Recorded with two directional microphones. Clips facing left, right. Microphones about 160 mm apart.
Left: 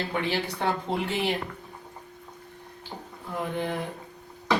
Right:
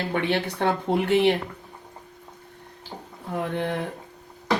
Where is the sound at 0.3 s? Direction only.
60° right (ahead or behind).